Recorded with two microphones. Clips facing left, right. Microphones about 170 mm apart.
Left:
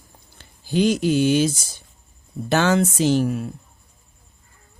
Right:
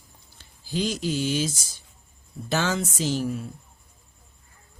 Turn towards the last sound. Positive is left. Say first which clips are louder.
# left 7 dB
turn(degrees=70)  # may be behind; listen again after turning